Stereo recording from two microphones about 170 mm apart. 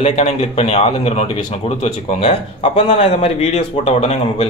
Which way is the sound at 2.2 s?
40° left (ahead or behind).